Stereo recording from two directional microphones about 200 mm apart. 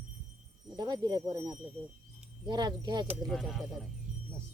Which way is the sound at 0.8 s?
20° right (ahead or behind).